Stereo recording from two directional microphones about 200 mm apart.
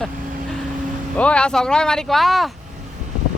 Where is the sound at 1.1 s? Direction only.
5° left (ahead or behind).